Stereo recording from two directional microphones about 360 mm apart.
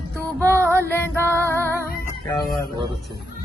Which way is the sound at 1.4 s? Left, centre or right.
Centre.